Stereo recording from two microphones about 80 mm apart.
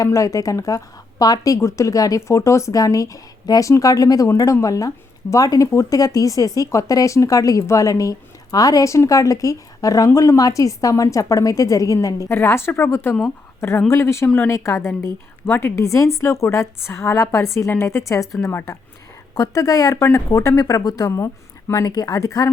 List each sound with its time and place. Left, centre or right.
0.0 s a woman's voice: left